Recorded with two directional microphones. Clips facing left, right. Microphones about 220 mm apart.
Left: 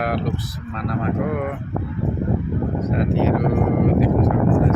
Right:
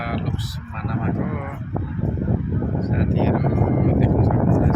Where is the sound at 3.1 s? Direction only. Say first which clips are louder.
Left 1 dB; 50° left (ahead or behind).